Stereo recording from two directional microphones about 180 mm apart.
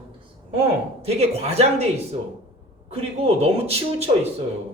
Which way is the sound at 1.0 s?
35° right (ahead or behind).